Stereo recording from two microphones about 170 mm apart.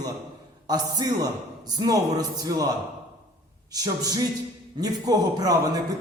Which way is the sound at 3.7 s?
20° right (ahead or behind).